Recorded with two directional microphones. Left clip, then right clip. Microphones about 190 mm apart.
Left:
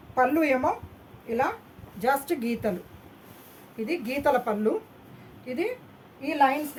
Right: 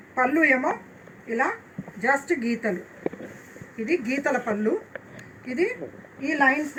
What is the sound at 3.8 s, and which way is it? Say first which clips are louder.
Speech: right 1 dB; 50° left (ahead or behind).